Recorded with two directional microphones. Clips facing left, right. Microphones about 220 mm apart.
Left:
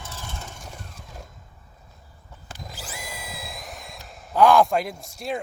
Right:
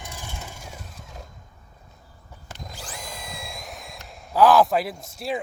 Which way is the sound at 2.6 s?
5° left (ahead or behind).